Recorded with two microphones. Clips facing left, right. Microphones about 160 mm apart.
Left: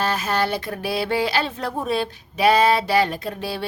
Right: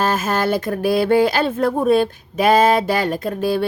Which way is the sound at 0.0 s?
45° right (ahead or behind).